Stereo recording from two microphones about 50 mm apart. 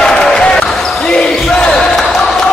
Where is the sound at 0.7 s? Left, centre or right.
Centre.